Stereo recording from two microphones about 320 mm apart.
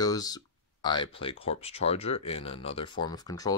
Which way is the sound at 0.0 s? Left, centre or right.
Centre.